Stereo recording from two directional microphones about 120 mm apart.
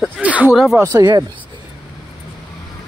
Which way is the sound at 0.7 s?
25° right (ahead or behind).